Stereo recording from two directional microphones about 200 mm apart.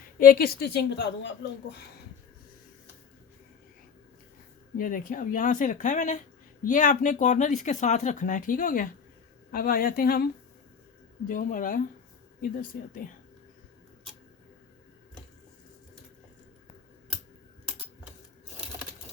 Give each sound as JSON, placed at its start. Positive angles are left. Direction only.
{"t": 0.2, "sound": "a woman's voice", "side_deg": 45}
{"t": 4.8, "sound": "a woman's voice", "side_deg": 45}
{"t": 11.3, "sound": "a woman's voice", "side_deg": 40}